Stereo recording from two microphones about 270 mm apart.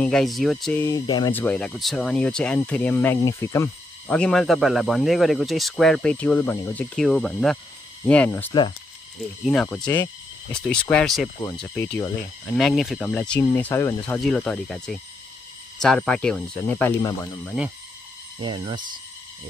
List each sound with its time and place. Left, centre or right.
0.0 s speech: centre
18.4 s speech: centre